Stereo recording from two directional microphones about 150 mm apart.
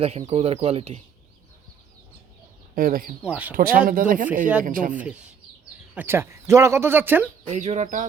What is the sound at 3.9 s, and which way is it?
Speech, 65° right (ahead or behind).